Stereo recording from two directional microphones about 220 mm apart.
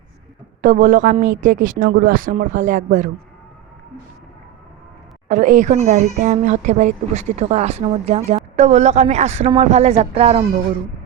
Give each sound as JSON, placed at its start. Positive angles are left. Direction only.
{"t": 0.6, "sound": "speech", "side_deg": -35}
{"t": 5.3, "sound": "speech", "side_deg": -35}